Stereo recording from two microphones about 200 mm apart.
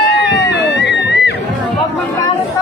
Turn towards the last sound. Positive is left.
turn(degrees=60)  # may be behind; listen again after turning